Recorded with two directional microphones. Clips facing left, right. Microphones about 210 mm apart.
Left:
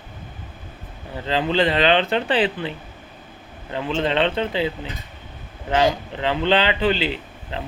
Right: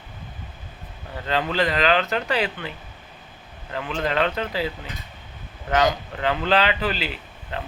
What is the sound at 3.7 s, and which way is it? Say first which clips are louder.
A man's voice: left 3 dB; 25° left (ahead or behind).